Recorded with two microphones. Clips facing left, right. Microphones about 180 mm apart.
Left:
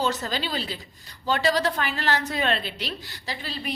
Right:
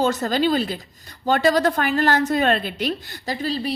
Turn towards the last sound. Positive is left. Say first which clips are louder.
# right 9 dB
turn(degrees=-40)  # may be behind; listen again after turning